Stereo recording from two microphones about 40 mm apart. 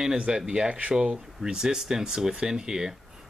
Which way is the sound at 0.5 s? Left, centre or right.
Right.